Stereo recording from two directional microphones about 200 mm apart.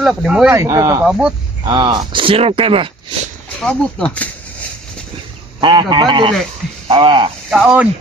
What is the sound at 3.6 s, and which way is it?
Speech, 5° left (ahead or behind).